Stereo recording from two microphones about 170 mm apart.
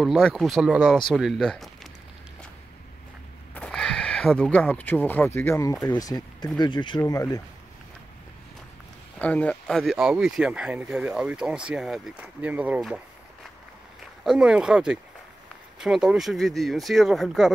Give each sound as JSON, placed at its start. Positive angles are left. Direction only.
{"t": 0.0, "sound": "speech", "side_deg": 0}
{"t": 3.5, "sound": "speech", "side_deg": 5}
{"t": 9.2, "sound": "speech", "side_deg": 10}